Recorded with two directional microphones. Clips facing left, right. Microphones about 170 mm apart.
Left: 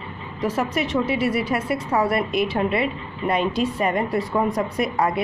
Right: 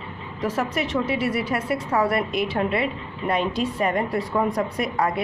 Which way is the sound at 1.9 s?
20° left (ahead or behind).